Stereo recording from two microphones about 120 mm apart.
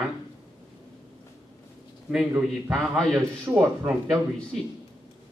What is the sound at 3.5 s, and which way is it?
Speech, 20° right (ahead or behind).